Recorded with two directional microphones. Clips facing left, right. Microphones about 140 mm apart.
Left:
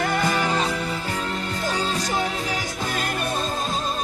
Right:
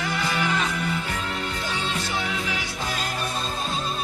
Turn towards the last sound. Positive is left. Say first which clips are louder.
# left 2 dB
turn(degrees=55)  # may be behind; listen again after turning